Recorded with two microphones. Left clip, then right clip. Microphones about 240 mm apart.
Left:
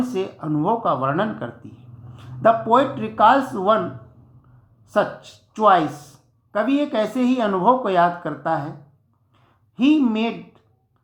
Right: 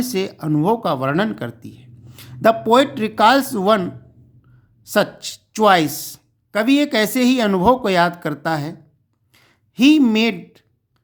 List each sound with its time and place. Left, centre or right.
0.1 s speech: right
5.5 s speech: right
9.3 s a sound: right